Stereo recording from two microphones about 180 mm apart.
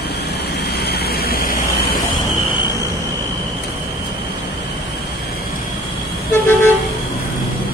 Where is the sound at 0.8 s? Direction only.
65° left (ahead or behind).